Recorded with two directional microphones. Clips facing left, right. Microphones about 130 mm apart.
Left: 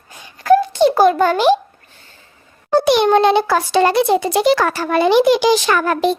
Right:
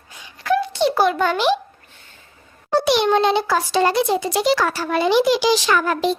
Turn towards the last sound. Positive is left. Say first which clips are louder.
# left 3 dB
turn(degrees=55)  # may be behind; listen again after turning